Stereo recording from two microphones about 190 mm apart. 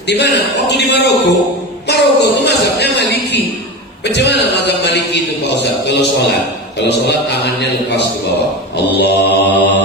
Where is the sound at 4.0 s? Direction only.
65° left (ahead or behind).